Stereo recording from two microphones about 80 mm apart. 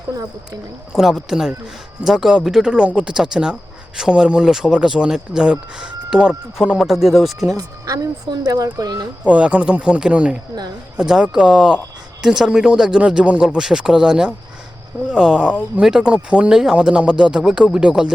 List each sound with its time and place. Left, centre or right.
0.9 s speech: centre
7.5 s speech: right
9.2 s speech: centre